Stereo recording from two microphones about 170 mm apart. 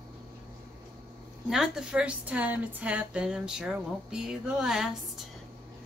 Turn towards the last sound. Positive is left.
turn(degrees=-5)  # may be behind; listen again after turning